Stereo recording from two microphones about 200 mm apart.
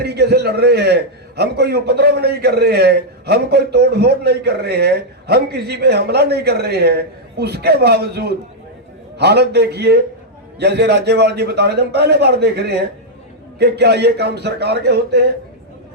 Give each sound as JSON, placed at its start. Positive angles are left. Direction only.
{"t": 0.0, "sound": "a man's voice", "side_deg": -55}